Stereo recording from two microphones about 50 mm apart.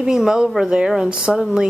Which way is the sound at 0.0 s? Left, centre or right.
Centre.